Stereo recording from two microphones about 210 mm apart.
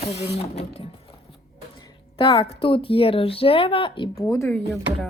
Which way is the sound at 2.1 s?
25° left (ahead or behind).